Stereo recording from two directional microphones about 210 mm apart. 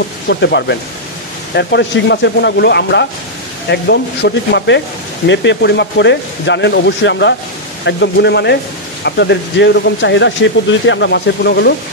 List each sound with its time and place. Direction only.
0.3 s speech: 55° left (ahead or behind)